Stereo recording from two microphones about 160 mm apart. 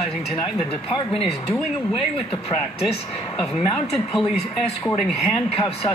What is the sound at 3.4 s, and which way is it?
Speech, centre (ahead or behind).